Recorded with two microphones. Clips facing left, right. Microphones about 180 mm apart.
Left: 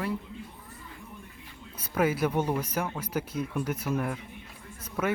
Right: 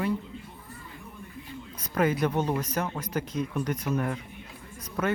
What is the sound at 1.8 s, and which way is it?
Speech, 5° left (ahead or behind).